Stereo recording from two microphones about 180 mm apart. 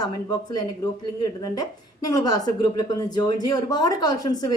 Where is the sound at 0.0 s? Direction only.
20° left (ahead or behind).